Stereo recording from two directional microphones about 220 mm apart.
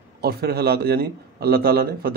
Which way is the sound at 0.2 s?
45° right (ahead or behind).